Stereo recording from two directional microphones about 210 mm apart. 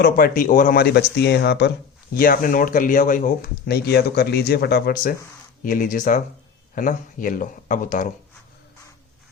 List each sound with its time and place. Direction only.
0.0 s speech: 40° left (ahead or behind)
2.1 s speech: 40° left (ahead or behind)